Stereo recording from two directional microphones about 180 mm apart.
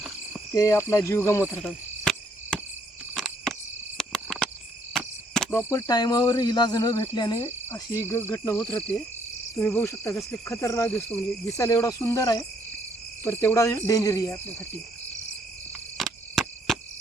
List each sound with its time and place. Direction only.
0.5 s cricket: 15° left (ahead or behind)
1.6 s cricket: 5° left (ahead or behind)
16.0 s cricket: centre (ahead or behind)